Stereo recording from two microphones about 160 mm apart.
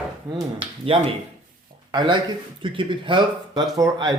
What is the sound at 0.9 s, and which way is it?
Speech, 35° right (ahead or behind).